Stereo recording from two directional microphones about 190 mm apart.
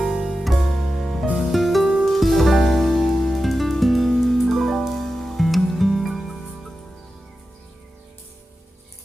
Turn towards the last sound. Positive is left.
turn(degrees=0)  # may be behind; listen again after turning